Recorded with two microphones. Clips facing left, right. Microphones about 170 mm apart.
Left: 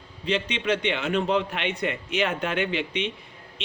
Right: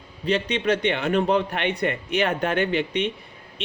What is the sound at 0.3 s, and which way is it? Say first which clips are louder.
Speech: right 3 dB; 45° right (ahead or behind).